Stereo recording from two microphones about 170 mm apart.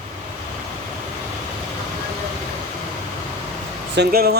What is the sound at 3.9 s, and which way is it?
Speech, 70° right (ahead or behind).